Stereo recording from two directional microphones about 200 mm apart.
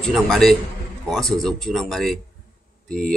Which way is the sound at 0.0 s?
Centre (ahead or behind).